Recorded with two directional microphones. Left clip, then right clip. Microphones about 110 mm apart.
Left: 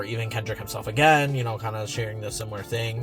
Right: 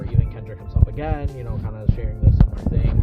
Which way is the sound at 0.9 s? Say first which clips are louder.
Left 12 dB; 35° left (ahead or behind).